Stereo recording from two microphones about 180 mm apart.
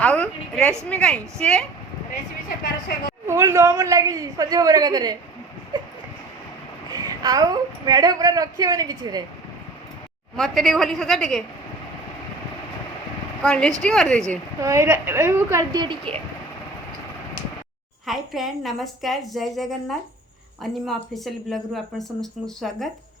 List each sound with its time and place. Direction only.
0.0 s a woman's voice: 5° left (ahead or behind)
3.2 s a woman's voice: 15° right (ahead or behind)
5.7 s a sound: 25° right (ahead or behind)
7.0 s a woman's voice: 20° right (ahead or behind)
10.3 s speech: centre (ahead or behind)
13.4 s speech: 5° left (ahead or behind)
14.6 s a woman's voice: 15° right (ahead or behind)
18.0 s speech: centre (ahead or behind)